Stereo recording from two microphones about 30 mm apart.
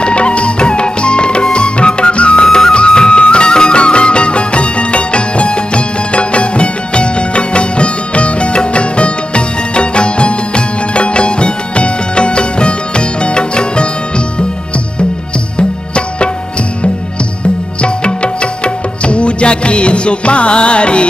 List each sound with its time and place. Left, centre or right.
0.0 s music: left
2.4 s music: left
15.5 s music: left
17.8 s music: left